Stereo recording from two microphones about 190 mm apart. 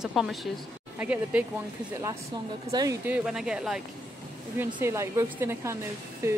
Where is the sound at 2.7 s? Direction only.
20° right (ahead or behind).